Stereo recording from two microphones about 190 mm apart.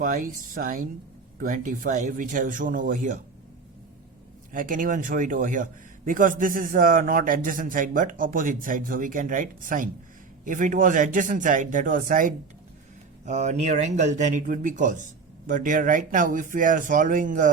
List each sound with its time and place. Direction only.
0.0 s a man's voice: 45° right (ahead or behind)
4.5 s a man's voice: 45° right (ahead or behind)